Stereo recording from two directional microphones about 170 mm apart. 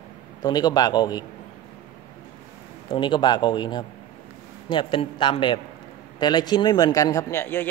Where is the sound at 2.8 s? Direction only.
30° left (ahead or behind).